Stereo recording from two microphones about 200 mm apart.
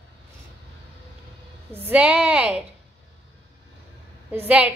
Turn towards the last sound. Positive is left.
turn(degrees=-5)  # may be behind; listen again after turning